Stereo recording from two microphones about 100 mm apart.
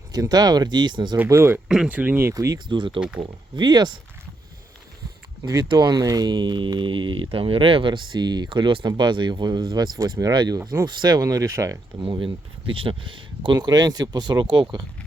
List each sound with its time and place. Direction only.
0.1 s speech: 40° right (ahead or behind)
1.3 s speech: 25° right (ahead or behind)
1.5 s speech: 5° right (ahead or behind)
2.3 s speech: 35° right (ahead or behind)
2.6 s speech: 55° right (ahead or behind)
5.4 s speech: 35° right (ahead or behind)
11.9 s speech: 55° right (ahead or behind)